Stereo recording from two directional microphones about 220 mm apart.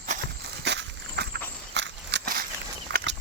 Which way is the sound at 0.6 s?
50° right (ahead or behind).